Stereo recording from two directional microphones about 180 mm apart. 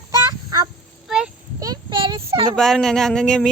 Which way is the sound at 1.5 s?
20° right (ahead or behind).